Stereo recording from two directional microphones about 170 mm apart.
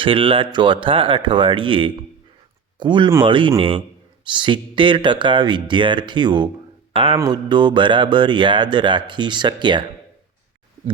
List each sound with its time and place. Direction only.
0.0 s speech: 30° right (ahead or behind)